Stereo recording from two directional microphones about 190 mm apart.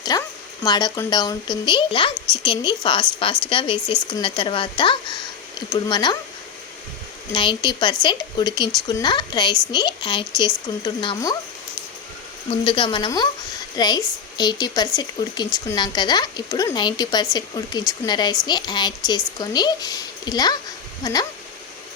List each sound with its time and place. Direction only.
0.1 s a woman's voice: 20° left (ahead or behind)
7.3 s a woman's voice: 25° left (ahead or behind)
12.5 s a woman's voice: 25° left (ahead or behind)